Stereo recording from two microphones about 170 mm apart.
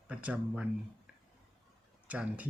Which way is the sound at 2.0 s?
10° right (ahead or behind).